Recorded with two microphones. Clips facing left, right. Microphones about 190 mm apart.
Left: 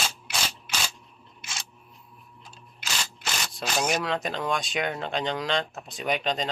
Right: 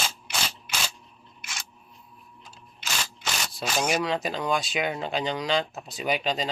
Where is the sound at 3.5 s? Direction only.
Centre (ahead or behind).